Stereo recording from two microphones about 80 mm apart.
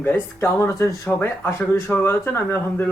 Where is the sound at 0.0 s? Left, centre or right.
Left.